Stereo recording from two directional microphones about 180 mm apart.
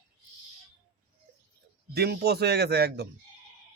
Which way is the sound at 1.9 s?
65° right (ahead or behind).